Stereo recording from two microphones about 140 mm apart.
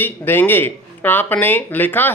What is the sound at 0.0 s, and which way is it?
Speech, 15° left (ahead or behind).